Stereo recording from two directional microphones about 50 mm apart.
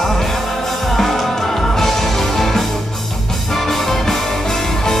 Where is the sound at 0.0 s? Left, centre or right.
Centre.